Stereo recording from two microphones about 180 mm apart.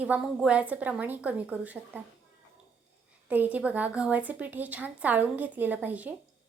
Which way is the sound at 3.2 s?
10° right (ahead or behind).